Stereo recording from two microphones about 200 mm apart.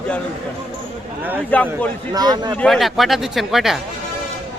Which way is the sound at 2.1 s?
20° right (ahead or behind).